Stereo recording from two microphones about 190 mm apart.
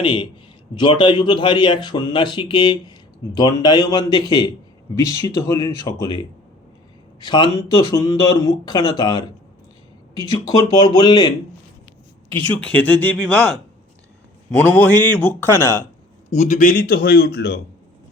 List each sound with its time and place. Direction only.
0.0 s a man's voice: 25° left (ahead or behind)
12.5 s a man's voice: 10° left (ahead or behind)
16.3 s speech: 40° left (ahead or behind); by 17.6 s 60° left (ahead or behind)